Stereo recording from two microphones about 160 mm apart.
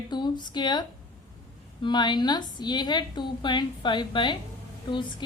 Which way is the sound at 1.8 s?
30° left (ahead or behind).